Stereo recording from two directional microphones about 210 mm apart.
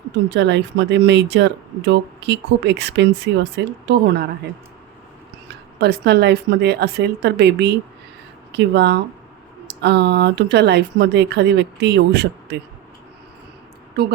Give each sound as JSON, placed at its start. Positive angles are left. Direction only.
{"t": 0.3, "sound": "speech", "side_deg": -55}
{"t": 5.5, "sound": "speech", "side_deg": -50}
{"t": 14.0, "sound": "speech", "side_deg": -50}